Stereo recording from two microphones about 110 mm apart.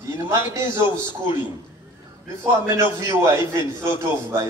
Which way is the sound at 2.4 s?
25° right (ahead or behind).